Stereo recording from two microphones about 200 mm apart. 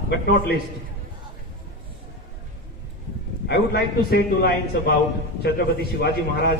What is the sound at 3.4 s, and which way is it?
A man's voice, 55° left (ahead or behind).